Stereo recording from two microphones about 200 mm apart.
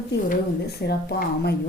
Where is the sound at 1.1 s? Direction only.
55° left (ahead or behind).